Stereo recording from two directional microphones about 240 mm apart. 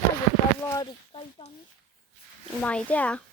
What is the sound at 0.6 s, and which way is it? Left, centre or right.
Speech, centre.